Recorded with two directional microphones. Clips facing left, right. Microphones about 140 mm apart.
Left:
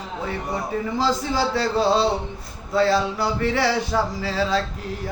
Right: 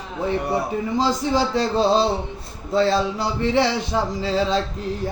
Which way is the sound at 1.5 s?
20° right (ahead or behind).